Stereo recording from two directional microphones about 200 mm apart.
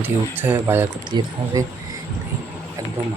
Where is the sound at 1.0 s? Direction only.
20° right (ahead or behind).